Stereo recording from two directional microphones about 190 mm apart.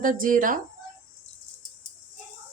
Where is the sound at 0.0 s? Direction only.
45° right (ahead or behind).